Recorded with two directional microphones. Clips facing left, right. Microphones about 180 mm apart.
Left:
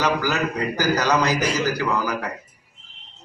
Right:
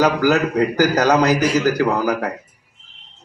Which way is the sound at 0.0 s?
45° right (ahead or behind).